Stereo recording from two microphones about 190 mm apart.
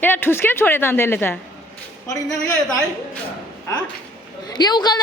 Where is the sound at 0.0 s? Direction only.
10° left (ahead or behind).